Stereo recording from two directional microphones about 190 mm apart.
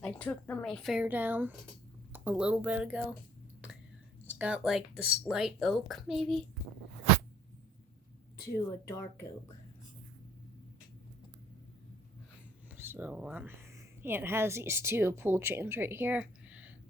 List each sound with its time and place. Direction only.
0.0 s speech: 10° left (ahead or behind)
4.3 s speech: 5° right (ahead or behind)
8.6 s speech: 15° left (ahead or behind)
12.7 s speech: 10° right (ahead or behind)